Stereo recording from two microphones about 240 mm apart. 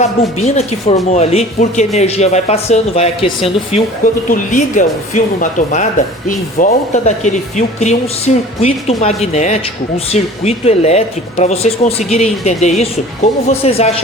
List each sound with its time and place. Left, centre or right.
0.4 s speech: left